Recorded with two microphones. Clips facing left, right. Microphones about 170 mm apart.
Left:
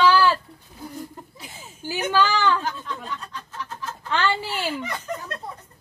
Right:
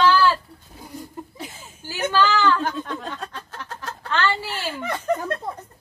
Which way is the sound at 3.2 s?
90° right.